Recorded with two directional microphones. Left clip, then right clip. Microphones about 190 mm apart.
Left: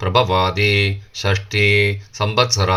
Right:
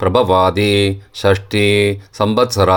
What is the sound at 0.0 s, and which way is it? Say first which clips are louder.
Mantra: right 4 dB; 50° right (ahead or behind).